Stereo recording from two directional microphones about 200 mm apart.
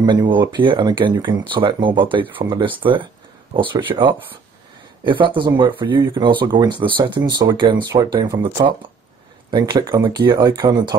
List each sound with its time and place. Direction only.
0.0 s speech: 20° right (ahead or behind)